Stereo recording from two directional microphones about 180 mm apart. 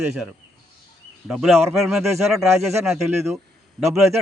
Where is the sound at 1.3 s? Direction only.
Centre (ahead or behind).